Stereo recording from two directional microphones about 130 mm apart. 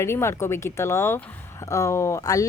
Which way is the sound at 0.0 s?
20° left (ahead or behind).